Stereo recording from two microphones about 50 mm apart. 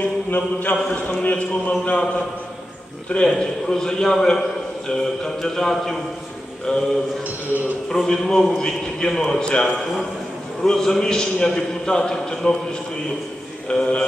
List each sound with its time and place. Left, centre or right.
0.0 s mantra: left
1.2 s speech: left
3.3 s a man's voice: centre
7.2 s a man's voice: right
8.1 s a man's voice: centre
13.7 s speech: left